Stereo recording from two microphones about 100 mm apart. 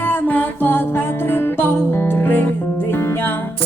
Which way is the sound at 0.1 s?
20° left (ahead or behind).